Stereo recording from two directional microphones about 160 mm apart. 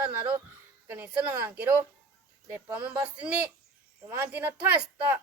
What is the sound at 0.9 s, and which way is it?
Speech, 10° right (ahead or behind).